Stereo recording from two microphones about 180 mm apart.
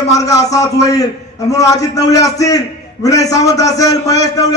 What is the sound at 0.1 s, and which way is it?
A man's voice, 20° left (ahead or behind).